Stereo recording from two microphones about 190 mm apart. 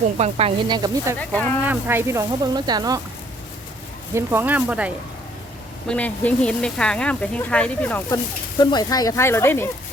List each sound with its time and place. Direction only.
0.2 s speech: 30° right (ahead or behind)
1.2 s speech: 5° left (ahead or behind)
1.7 s speech: 10° right (ahead or behind)
4.1 s speech: 10° right (ahead or behind)
5.9 s speech: 5° left (ahead or behind)
8.1 s speech: 20° left (ahead or behind)